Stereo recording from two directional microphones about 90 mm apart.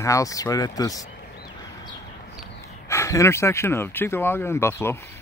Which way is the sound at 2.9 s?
35° left (ahead or behind).